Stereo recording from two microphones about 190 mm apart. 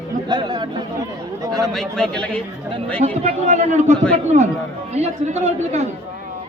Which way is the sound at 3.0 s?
35° right (ahead or behind).